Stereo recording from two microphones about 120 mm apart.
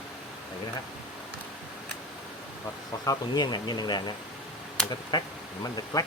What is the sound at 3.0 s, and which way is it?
Speech, 35° left (ahead or behind).